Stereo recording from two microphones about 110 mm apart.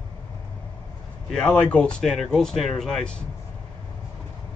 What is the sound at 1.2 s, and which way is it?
Speech, 5° left (ahead or behind).